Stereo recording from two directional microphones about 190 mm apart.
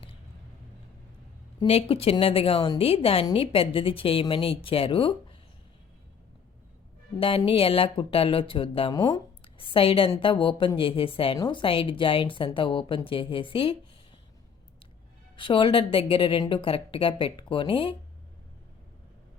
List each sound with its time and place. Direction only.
1.5 s speech: 30° left (ahead or behind)
7.2 s speech: 30° left (ahead or behind)
15.4 s speech: 25° left (ahead or behind)